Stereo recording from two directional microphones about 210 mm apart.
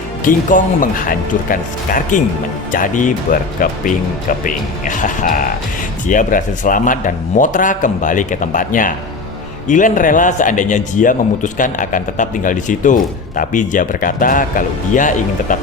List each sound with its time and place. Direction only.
0.3 s a man's voice: 40° left (ahead or behind)